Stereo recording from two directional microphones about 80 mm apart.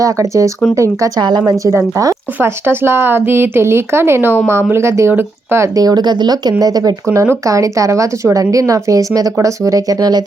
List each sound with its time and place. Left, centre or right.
0.0 s speech: right
1.2 s a woman's voice: right
1.5 s speech: right
2.4 s a woman's voice: right
5.8 s speech: right
7.1 s speech: right